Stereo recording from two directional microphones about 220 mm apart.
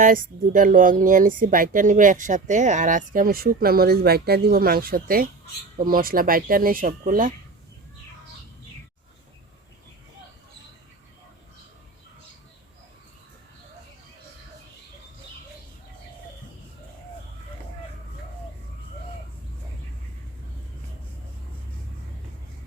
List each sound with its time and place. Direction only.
0.0 s speech: 40° right (ahead or behind)